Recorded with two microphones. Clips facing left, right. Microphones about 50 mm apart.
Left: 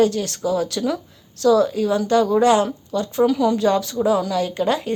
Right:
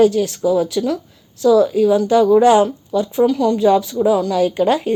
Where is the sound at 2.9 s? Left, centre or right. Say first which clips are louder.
Right 2 dB; centre.